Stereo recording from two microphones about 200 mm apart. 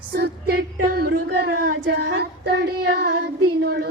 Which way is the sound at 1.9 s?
65° right (ahead or behind).